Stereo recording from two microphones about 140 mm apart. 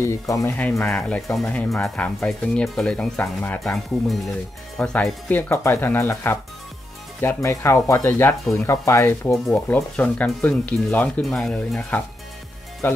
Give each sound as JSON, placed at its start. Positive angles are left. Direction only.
{"t": 0.0, "sound": "speech", "side_deg": 20}
{"t": 0.8, "sound": "speech", "side_deg": 5}
{"t": 9.5, "sound": "speech", "side_deg": 5}